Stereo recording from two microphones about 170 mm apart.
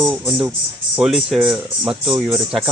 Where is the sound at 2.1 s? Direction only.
15° right (ahead or behind).